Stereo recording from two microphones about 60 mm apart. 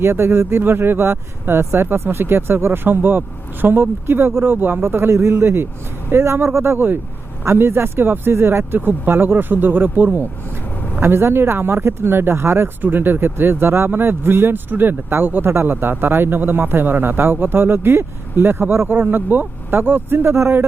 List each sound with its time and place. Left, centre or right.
0.0 s speech: right
11.0 s speech: right